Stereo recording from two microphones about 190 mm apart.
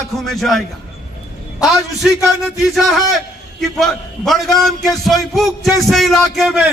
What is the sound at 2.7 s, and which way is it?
A man's voice, centre (ahead or behind).